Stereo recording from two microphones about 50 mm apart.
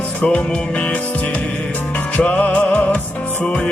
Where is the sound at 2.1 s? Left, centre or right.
Left.